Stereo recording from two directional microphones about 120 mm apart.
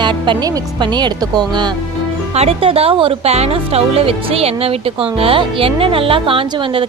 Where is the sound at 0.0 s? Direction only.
40° right (ahead or behind).